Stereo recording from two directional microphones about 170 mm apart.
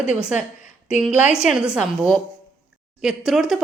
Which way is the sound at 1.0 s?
5° right (ahead or behind).